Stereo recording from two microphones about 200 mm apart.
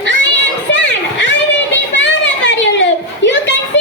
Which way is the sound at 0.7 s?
65° left (ahead or behind).